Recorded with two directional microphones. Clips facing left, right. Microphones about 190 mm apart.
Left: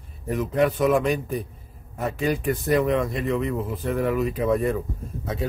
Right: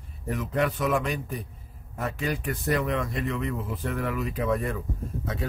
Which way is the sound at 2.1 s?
20° left (ahead or behind).